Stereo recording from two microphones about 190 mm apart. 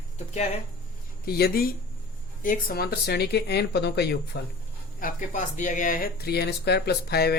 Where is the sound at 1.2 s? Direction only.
55° left (ahead or behind).